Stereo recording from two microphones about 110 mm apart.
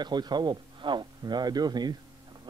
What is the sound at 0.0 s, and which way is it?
A man's voice, 40° right (ahead or behind).